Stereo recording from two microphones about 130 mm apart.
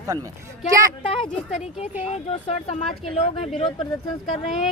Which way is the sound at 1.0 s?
45° left (ahead or behind).